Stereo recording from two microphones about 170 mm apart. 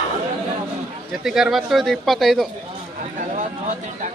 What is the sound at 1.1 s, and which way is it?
Speech, centre (ahead or behind).